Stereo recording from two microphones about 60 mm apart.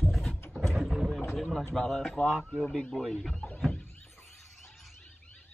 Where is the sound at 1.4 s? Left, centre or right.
Centre.